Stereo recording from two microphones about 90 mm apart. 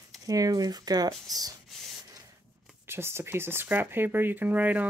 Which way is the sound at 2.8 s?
25° right (ahead or behind).